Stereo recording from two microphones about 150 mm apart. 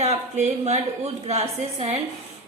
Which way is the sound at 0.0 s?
50° right (ahead or behind).